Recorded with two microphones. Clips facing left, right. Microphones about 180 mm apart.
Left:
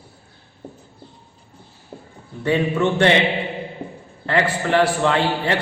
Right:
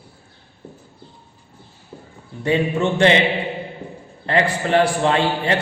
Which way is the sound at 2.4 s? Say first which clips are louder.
Even; 20° right (ahead or behind).